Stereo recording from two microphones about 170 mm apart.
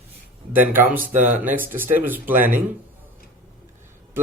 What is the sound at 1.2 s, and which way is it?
Speech, 45° right (ahead or behind).